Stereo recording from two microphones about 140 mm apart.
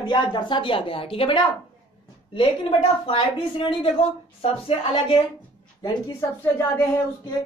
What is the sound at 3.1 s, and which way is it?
A woman's voice, 35° left (ahead or behind).